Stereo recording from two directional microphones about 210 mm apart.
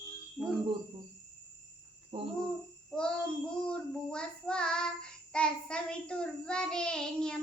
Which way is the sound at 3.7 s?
5° left (ahead or behind).